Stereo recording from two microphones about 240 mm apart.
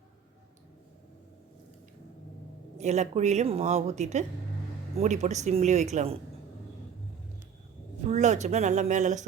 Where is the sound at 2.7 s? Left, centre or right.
Right.